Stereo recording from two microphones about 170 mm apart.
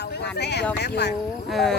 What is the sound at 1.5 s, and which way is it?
Speech, centre (ahead or behind).